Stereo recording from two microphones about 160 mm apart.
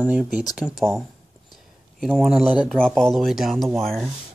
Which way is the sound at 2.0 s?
Centre (ahead or behind).